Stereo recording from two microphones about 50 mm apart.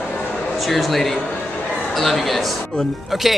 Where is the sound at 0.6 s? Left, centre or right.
Centre.